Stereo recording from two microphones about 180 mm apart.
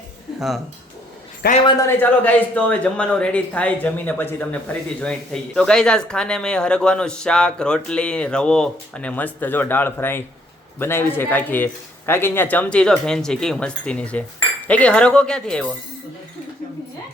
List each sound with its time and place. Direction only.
0.3 s speech: centre (ahead or behind)
1.4 s a man's voice: 60° left (ahead or behind)
1.9 s a man's voice: 10° left (ahead or behind)